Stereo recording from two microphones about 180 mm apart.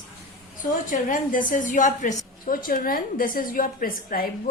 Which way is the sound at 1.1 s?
45° left (ahead or behind).